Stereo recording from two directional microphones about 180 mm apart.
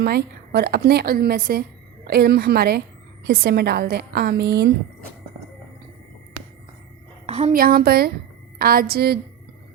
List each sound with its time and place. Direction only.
0.0 s a woman's voice: 65° right (ahead or behind)
7.3 s a sound: 35° right (ahead or behind)
7.5 s a woman's voice: 55° right (ahead or behind)